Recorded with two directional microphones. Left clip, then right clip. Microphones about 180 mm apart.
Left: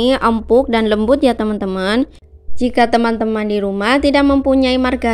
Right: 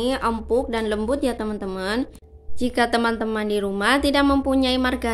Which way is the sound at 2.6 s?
35° left (ahead or behind).